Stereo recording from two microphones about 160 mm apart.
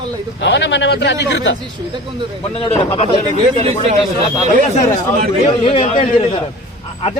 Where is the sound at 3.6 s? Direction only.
45° right (ahead or behind).